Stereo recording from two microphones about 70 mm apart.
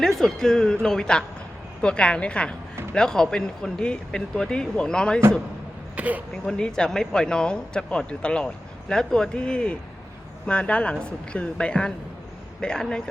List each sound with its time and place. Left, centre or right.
0.0 s speech: centre
6.0 s speech: right
6.3 s speech: centre